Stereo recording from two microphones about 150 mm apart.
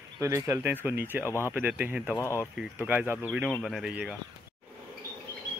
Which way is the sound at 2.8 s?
10° right (ahead or behind).